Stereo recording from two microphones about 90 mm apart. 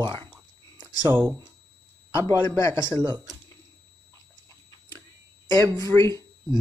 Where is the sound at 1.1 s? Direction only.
30° right (ahead or behind).